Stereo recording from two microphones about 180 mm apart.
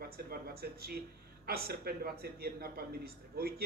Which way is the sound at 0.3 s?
60° right (ahead or behind).